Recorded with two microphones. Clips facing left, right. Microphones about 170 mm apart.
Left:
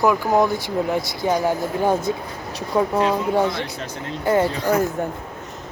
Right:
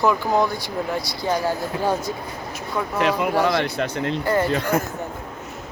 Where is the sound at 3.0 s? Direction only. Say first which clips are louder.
Right 4 dB; 75° right (ahead or behind).